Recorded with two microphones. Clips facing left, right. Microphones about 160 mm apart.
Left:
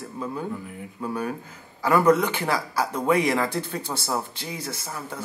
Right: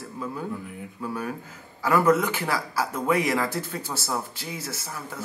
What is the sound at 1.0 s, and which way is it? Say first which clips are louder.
A man's voice: left 3 dB; 20° left (ahead or behind).